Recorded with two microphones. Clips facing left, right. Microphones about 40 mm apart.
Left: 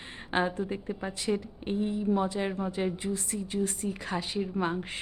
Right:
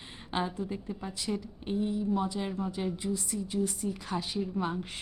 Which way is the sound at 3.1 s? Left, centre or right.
Left.